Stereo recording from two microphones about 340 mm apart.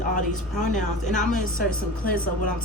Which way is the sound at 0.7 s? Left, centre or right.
Left.